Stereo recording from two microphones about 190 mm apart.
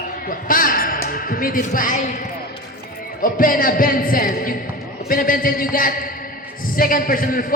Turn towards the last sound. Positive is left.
turn(degrees=45)  # may be behind; listen again after turning